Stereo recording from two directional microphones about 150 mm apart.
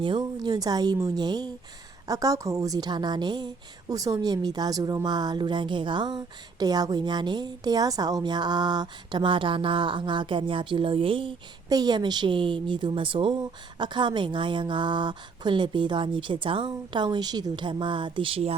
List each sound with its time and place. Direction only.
0.0 s a woman's voice: 30° right (ahead or behind)